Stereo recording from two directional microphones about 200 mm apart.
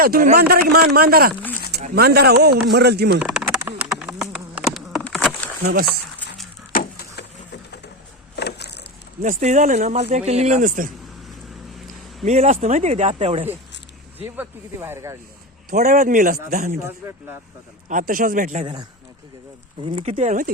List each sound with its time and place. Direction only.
0.0 s speech: 45° right (ahead or behind)
3.2 s insect: 5° right (ahead or behind)
5.8 s a sound: centre (ahead or behind)
6.7 s a sound: 55° left (ahead or behind)
9.2 s speech: 40° right (ahead or behind)
12.2 s speech: 35° right (ahead or behind)
14.3 s speech: 10° right (ahead or behind)
15.7 s speech: 45° right (ahead or behind)
17.8 s speech: 40° right (ahead or behind)
18.6 s speech: 20° right (ahead or behind); by 20.5 s 40° right (ahead or behind)